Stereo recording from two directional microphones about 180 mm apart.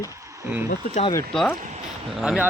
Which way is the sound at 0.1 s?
15° right (ahead or behind).